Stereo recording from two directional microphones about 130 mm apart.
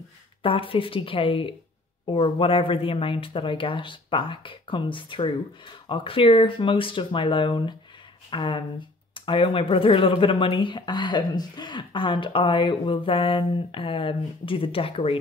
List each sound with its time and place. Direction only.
0.4 s a woman's voice: 45° left (ahead or behind)